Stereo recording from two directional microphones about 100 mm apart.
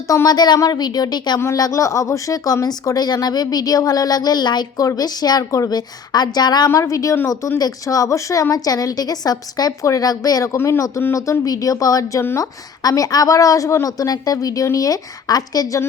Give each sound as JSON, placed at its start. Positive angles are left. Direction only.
{"t": 0.1, "sound": "speech", "side_deg": 40}
{"t": 1.4, "sound": "speech", "side_deg": 35}
{"t": 6.7, "sound": "speech", "side_deg": 30}